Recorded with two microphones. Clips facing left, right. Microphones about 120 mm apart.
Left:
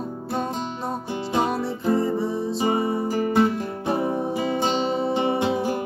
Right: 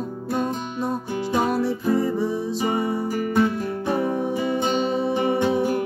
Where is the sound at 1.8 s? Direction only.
25° left (ahead or behind).